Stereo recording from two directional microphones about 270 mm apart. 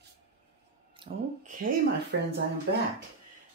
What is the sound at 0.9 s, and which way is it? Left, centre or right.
Speech, right.